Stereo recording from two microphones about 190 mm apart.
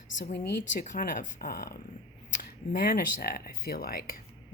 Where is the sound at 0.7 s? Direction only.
40° left (ahead or behind).